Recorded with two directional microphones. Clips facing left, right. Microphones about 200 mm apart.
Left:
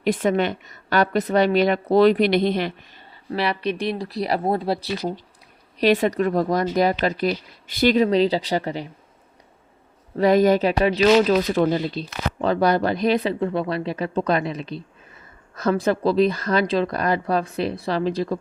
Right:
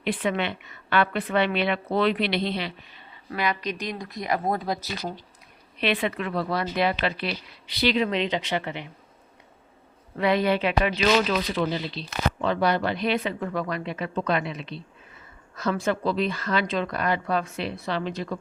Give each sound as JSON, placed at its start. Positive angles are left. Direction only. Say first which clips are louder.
{"t": 0.0, "sound": "speech", "louder": "left 6 dB", "side_deg": 45}
{"t": 3.2, "sound": "speech", "louder": "left 4 dB", "side_deg": 30}
{"t": 10.2, "sound": "speech", "louder": "left 6 dB", "side_deg": 40}